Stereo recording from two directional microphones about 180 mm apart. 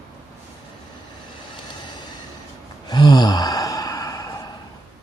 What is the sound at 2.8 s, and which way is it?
Sigh, 25° left (ahead or behind).